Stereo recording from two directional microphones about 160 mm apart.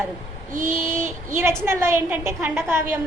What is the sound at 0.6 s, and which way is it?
A woman's voice, 15° right (ahead or behind).